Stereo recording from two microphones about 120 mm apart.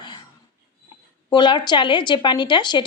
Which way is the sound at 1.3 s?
40° left (ahead or behind).